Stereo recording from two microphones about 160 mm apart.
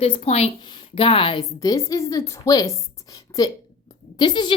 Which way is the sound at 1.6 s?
20° left (ahead or behind).